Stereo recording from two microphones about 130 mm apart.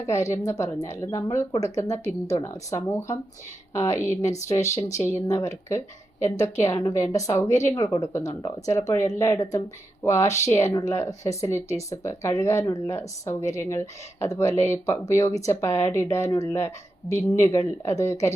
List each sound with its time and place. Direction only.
0.0 s a woman's voice: 25° left (ahead or behind)